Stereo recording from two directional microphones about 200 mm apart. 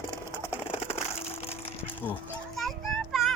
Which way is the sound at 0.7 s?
30° left (ahead or behind).